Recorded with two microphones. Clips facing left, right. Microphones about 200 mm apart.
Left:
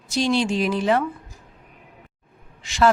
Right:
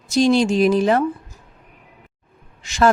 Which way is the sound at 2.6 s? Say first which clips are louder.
Right 2 dB; 45° right (ahead or behind).